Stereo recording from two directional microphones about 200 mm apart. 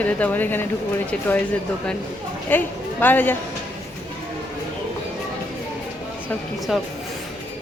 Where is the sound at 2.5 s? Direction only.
10° left (ahead or behind).